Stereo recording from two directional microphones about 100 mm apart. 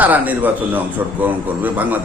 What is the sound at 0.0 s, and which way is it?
A man's voice, 15° right (ahead or behind).